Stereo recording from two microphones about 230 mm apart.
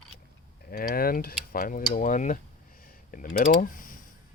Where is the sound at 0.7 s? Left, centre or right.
Left.